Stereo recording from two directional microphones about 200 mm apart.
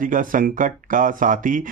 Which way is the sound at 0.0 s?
40° right (ahead or behind).